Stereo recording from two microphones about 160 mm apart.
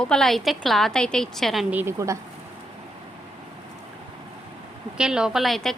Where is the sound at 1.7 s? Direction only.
15° right (ahead or behind).